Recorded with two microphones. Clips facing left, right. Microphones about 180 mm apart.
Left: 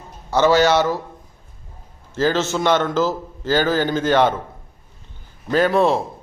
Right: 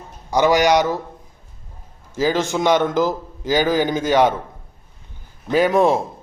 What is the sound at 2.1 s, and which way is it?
A man's voice, 10° right (ahead or behind).